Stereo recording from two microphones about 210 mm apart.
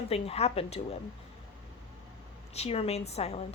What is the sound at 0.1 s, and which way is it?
Speech, 30° left (ahead or behind).